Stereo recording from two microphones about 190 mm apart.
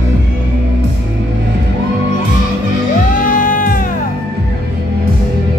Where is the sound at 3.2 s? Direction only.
45° left (ahead or behind).